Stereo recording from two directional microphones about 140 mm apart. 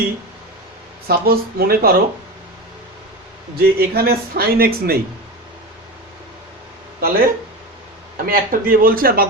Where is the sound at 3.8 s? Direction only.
90° right.